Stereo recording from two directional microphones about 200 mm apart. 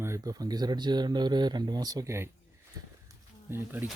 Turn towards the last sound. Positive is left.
turn(degrees=-10)  # may be behind; listen again after turning